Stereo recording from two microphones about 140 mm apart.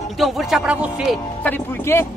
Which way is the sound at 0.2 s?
Centre (ahead or behind).